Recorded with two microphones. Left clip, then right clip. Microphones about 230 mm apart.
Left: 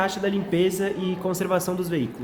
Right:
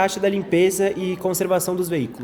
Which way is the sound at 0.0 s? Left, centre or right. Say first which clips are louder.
Right 5 dB; right.